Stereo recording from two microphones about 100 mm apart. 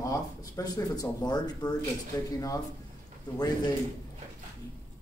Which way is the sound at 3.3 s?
40° left (ahead or behind).